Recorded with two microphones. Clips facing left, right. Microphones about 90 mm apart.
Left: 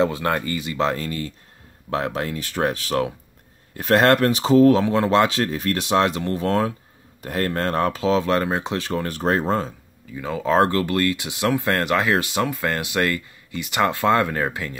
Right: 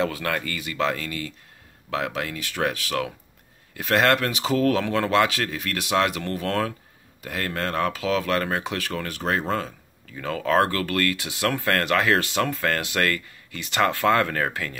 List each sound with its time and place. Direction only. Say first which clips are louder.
0.0 s speech: left 5 dB; 25° left (ahead or behind)
4.6 s speech: left 7 dB; 25° left (ahead or behind)
7.2 s speech: left 5 dB; 40° left (ahead or behind)
10.1 s speech: left 2 dB; 15° left (ahead or behind)